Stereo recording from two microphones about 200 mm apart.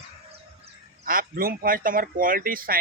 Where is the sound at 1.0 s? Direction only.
45° right (ahead or behind).